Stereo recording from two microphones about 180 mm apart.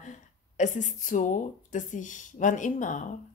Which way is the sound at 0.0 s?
45° left (ahead or behind).